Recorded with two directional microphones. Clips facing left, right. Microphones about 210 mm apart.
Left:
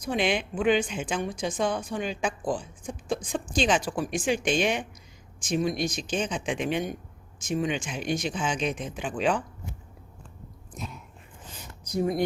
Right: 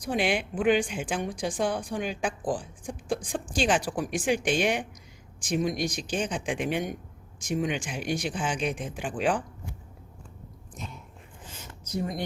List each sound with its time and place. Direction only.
0.0 s speech: 10° right (ahead or behind)